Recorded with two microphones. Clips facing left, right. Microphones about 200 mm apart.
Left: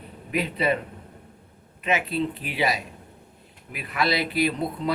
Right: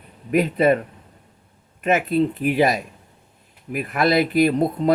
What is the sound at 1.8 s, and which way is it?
Speech, 50° right (ahead or behind).